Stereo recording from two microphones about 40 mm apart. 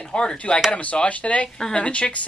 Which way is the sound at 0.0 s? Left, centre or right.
Left.